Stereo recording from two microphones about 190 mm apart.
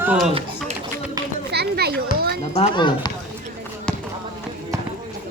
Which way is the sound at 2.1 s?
55° right (ahead or behind).